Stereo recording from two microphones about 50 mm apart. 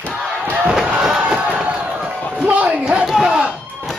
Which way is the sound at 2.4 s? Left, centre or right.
Right.